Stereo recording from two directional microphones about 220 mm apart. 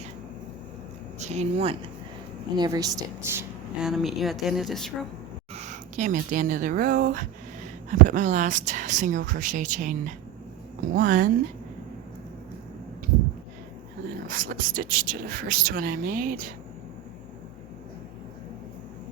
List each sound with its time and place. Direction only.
1.2 s speech: 30° right (ahead or behind)
2.6 s a woman's voice: 15° right (ahead or behind); by 4.9 s centre (ahead or behind)
5.5 s speech: 35° right (ahead or behind)
14.3 s speech: 35° right (ahead or behind)